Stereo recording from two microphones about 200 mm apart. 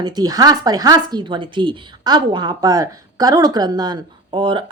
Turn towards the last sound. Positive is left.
turn(degrees=-25)  # may be behind; listen again after turning